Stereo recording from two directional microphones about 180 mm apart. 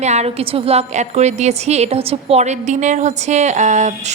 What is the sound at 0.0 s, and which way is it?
A woman's voice, 40° right (ahead or behind).